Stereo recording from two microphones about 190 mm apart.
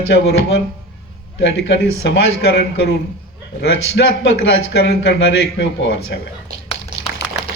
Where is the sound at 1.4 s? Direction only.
70° left (ahead or behind).